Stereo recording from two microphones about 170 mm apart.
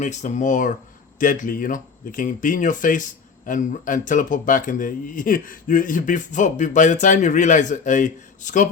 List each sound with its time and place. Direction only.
0.0 s speech: 45° left (ahead or behind)